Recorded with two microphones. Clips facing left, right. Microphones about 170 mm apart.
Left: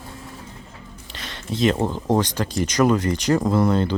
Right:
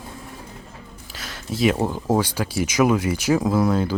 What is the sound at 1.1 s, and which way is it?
Speech, centre (ahead or behind).